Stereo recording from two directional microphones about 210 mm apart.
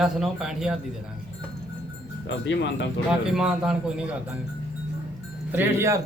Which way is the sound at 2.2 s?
60° left (ahead or behind).